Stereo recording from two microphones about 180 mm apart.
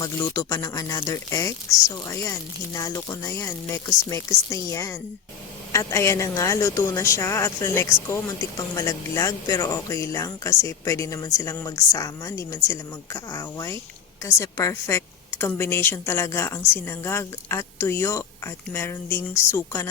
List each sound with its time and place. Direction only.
0.0 s speech: 20° left (ahead or behind)
2.7 s a woman's voice: 20° left (ahead or behind)